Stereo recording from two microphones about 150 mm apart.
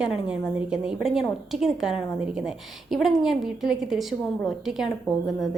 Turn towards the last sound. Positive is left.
turn(degrees=0)  # may be behind; listen again after turning